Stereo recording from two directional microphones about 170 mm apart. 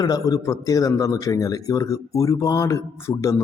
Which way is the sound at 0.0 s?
20° left (ahead or behind).